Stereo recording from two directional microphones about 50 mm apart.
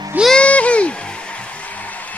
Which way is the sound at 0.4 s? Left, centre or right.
Left.